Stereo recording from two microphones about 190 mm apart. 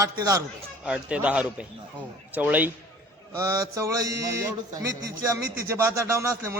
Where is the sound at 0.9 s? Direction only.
5° right (ahead or behind).